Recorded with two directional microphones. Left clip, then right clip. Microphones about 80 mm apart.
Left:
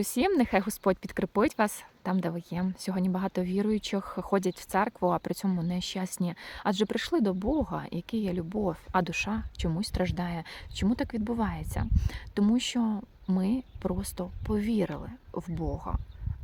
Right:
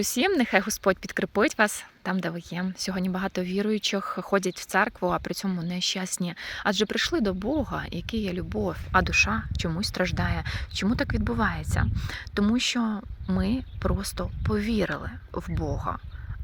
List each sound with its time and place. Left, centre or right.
0.0 s speech: left
9.0 s speech: left
11.9 s speech: left; by 16.0 s centre